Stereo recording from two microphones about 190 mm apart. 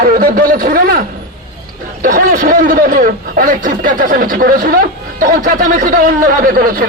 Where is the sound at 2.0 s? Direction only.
45° right (ahead or behind).